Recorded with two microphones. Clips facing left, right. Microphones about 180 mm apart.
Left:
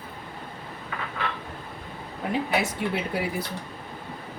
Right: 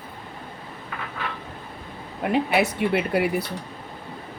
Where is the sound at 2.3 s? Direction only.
65° right (ahead or behind).